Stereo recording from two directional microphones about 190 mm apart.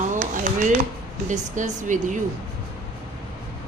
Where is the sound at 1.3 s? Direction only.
40° right (ahead or behind).